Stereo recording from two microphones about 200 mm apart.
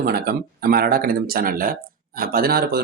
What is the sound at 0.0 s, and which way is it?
Speech, 50° right (ahead or behind).